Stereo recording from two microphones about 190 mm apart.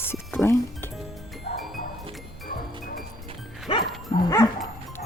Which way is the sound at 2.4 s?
50° left (ahead or behind).